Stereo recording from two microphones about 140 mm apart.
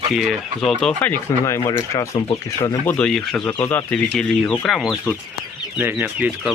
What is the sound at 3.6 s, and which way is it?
Speech, 15° left (ahead or behind).